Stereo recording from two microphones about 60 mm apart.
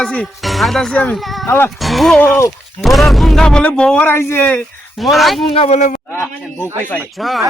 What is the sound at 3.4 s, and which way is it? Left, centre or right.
Speech, centre.